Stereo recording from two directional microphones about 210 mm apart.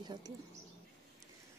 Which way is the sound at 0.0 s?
20° right (ahead or behind).